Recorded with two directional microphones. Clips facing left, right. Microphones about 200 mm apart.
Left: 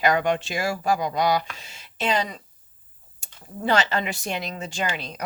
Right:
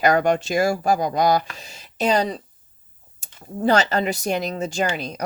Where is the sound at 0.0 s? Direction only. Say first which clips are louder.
Right 4 dB; 45° right (ahead or behind).